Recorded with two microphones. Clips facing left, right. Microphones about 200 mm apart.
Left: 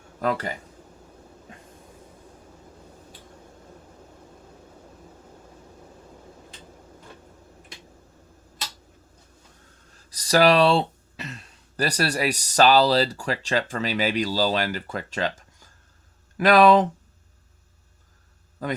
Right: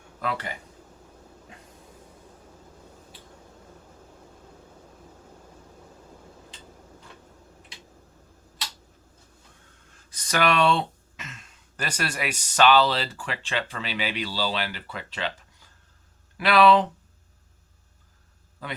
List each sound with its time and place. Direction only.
0.2 s speech: 40° left (ahead or behind)
10.1 s speech: 35° left (ahead or behind)
18.6 s speech: 45° left (ahead or behind)